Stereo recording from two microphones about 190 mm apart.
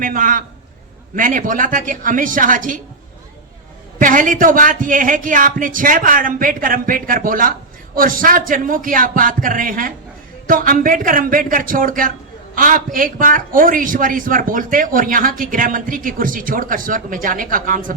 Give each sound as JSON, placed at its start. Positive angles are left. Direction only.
{"t": 0.0, "sound": "a man's voice", "side_deg": -45}
{"t": 4.0, "sound": "a man's voice", "side_deg": -45}